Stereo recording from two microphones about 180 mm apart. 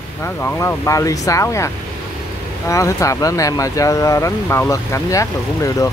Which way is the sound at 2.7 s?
15° left (ahead or behind).